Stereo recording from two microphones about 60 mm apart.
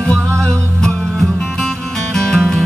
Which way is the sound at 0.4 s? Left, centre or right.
Centre.